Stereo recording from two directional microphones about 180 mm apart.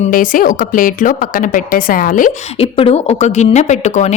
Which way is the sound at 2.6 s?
30° left (ahead or behind).